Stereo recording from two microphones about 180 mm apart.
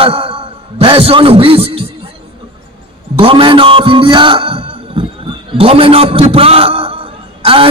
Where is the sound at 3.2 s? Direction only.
30° right (ahead or behind).